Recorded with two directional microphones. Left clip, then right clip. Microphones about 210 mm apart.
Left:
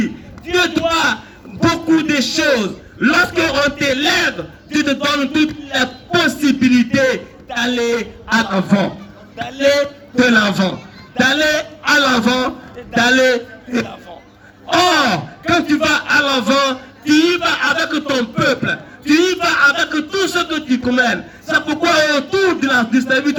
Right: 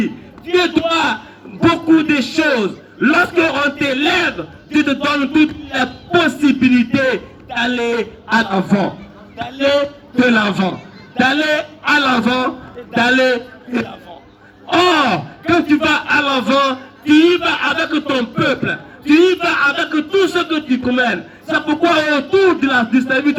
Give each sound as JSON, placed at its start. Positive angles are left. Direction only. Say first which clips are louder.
{"t": 0.5, "sound": "a man's voice", "louder": "right 1 dB", "side_deg": 35}
{"t": 5.7, "sound": "music", "louder": "even", "side_deg": 35}
{"t": 6.6, "sound": "a man's voice", "louder": "even", "side_deg": 35}
{"t": 8.5, "sound": "a man's voice", "louder": "even", "side_deg": 50}
{"t": 10.2, "sound": "a man's voice", "louder": "left 1 dB", "side_deg": 35}
{"t": 13.8, "sound": "a sound", "louder": "even", "side_deg": 0}
{"t": 14.7, "sound": "a man's voice", "louder": "even", "side_deg": 35}